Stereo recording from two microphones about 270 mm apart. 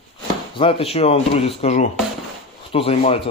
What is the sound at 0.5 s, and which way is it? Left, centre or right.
Speech, centre.